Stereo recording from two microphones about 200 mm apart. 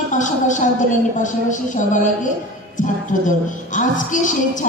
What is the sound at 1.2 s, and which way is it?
A woman's voice, 40° left (ahead or behind).